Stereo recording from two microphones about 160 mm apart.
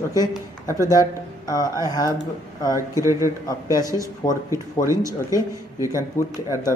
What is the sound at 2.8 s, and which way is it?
Speech, 20° right (ahead or behind).